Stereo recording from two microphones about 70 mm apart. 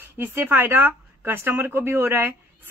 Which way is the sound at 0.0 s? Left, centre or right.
Right.